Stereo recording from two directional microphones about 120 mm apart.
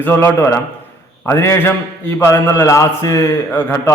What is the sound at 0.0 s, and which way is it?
A man's voice, 15° left (ahead or behind).